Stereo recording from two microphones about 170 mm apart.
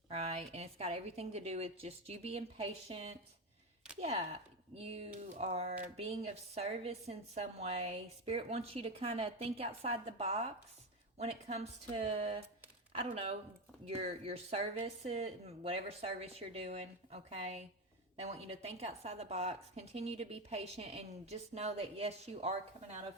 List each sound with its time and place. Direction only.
0.1 s speech: 40° right (ahead or behind)